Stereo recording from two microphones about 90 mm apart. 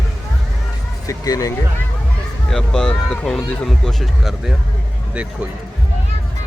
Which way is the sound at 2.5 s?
5° left (ahead or behind).